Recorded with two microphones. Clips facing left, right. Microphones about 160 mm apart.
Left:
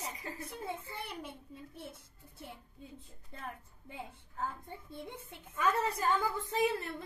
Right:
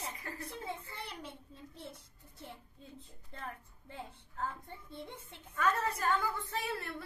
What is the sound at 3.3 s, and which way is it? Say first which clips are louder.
A woman's voice: even; 5° left (ahead or behind).